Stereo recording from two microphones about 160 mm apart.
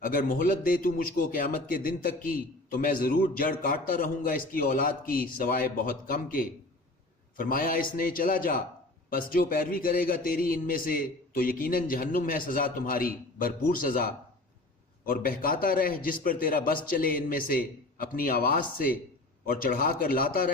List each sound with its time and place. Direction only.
0.0 s speech: 60° left (ahead or behind)